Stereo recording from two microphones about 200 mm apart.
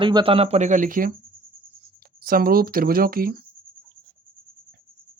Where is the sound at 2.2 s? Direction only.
45° right (ahead or behind).